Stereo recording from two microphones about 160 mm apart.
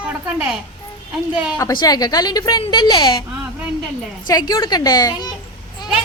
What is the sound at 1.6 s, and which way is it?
Speech, 20° left (ahead or behind).